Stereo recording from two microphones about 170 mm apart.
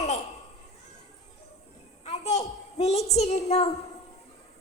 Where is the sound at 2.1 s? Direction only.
40° left (ahead or behind).